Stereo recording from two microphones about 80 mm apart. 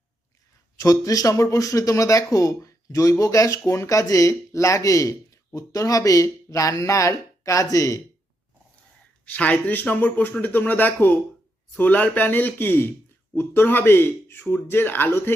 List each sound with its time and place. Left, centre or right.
0.8 s speech: left
9.2 s speech: centre